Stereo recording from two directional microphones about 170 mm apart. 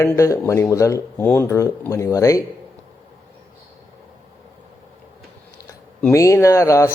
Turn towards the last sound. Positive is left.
turn(degrees=20)  # may be behind; listen again after turning